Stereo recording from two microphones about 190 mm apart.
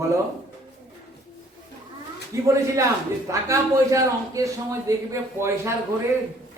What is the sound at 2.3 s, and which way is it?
A man's voice, 15° right (ahead or behind).